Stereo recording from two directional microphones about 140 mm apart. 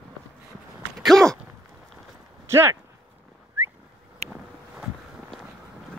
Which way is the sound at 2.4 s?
20° right (ahead or behind).